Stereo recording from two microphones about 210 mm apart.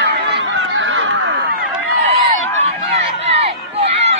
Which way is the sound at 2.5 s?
30° right (ahead or behind).